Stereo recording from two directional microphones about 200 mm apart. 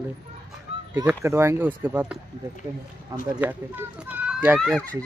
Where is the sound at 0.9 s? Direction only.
15° right (ahead or behind).